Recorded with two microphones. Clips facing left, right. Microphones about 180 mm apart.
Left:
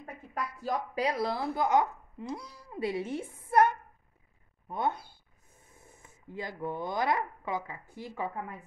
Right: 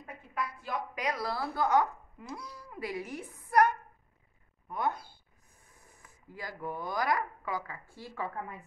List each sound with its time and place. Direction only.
0.0 s a woman's voice: 40° left (ahead or behind)
4.6 s speech: 25° left (ahead or behind)